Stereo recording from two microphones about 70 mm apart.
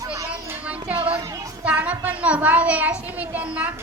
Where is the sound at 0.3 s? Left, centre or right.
Centre.